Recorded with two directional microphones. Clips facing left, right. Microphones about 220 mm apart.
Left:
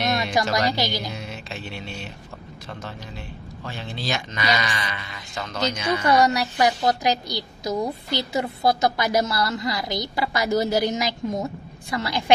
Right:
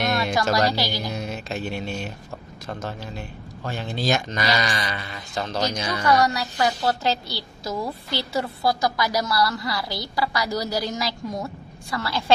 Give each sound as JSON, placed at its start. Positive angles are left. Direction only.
{"t": 0.1, "sound": "a woman's voice", "side_deg": 20}
{"t": 1.1, "sound": "music", "side_deg": -45}
{"t": 3.6, "sound": "speech", "side_deg": -45}
{"t": 6.0, "sound": "a woman's voice", "side_deg": 20}